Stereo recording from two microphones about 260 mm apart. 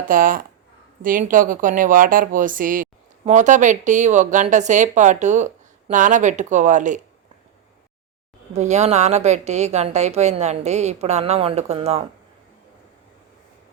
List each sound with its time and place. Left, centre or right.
0.1 s speech: right
8.5 s speech: right